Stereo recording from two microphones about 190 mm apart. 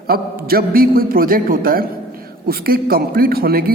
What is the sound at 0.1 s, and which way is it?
A man's voice, 50° right (ahead or behind).